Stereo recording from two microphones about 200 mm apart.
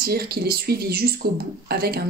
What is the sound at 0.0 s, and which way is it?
Speech, 50° right (ahead or behind).